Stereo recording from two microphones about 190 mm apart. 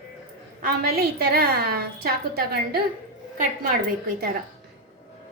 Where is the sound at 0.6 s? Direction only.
55° right (ahead or behind).